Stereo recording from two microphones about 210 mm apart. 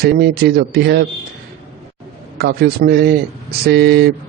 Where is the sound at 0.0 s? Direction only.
50° right (ahead or behind).